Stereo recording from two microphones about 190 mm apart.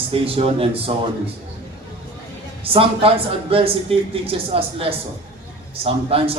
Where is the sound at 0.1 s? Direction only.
30° right (ahead or behind).